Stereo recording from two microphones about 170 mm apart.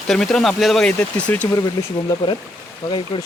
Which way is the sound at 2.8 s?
25° left (ahead or behind).